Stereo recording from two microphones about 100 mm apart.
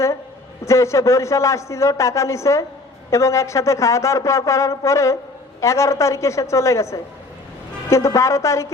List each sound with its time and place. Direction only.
0.6 s a man's voice: 30° left (ahead or behind)